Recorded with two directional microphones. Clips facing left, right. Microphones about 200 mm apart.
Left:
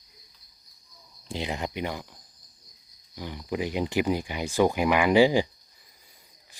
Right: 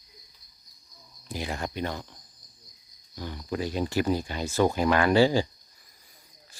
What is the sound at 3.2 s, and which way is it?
Speech, 15° left (ahead or behind).